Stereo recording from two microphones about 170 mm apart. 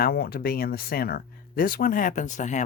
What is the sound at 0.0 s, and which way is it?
Speech, 60° left (ahead or behind).